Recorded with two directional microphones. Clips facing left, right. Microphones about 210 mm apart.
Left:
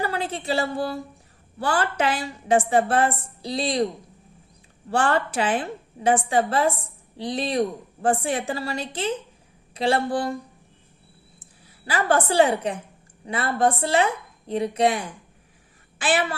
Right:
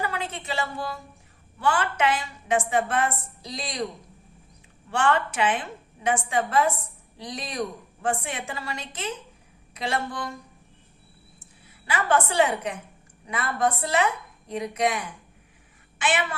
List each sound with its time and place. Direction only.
0.0 s a woman's voice: 35° left (ahead or behind)
4.9 s a woman's voice: 35° left (ahead or behind)
11.9 s a woman's voice: 35° left (ahead or behind)